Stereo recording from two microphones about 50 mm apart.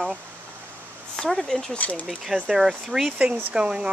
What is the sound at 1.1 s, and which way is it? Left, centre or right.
Speech, centre.